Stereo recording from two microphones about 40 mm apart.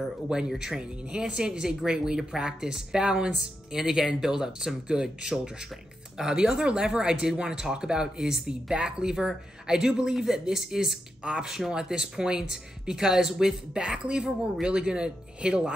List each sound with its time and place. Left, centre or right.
0.6 s speech: centre